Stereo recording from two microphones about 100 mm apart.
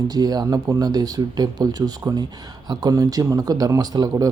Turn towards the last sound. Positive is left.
turn(degrees=-40)  # may be behind; listen again after turning